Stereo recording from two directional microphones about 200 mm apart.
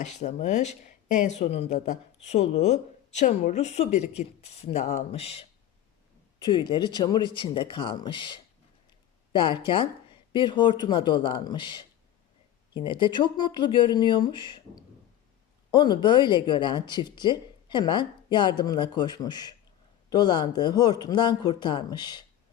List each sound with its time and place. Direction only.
0.2 s a woman's voice: 35° left (ahead or behind)